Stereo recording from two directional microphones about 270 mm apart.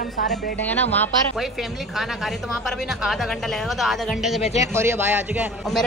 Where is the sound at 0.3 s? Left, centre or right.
Centre.